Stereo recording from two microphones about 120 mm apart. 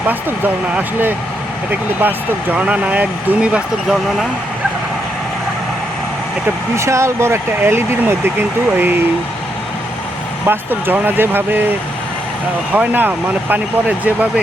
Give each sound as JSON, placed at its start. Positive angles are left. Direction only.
{"t": 0.1, "sound": "speech", "side_deg": -15}
{"t": 6.7, "sound": "speech", "side_deg": -25}
{"t": 10.4, "sound": "speech", "side_deg": -20}
{"t": 12.7, "sound": "speech", "side_deg": -15}